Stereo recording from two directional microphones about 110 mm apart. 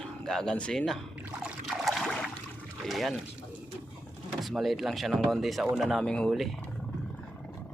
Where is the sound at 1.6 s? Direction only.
Centre (ahead or behind).